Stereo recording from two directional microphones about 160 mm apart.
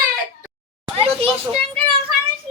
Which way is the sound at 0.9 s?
35° right (ahead or behind).